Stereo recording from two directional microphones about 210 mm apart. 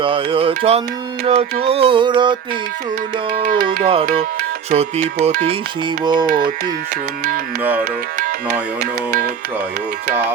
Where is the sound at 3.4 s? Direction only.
40° right (ahead or behind).